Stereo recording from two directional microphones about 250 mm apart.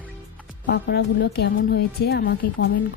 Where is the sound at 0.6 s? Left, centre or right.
Left.